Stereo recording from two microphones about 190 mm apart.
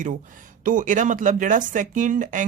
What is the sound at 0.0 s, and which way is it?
Speech, 45° right (ahead or behind).